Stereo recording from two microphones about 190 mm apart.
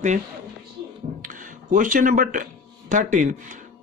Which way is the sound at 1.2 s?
45° right (ahead or behind).